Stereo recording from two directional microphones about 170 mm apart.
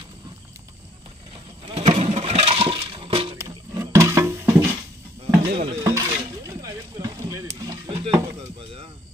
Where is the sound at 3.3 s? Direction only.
20° right (ahead or behind).